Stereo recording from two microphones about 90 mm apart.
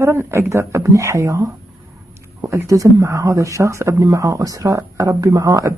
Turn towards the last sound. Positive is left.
turn(degrees=-40)  # may be behind; listen again after turning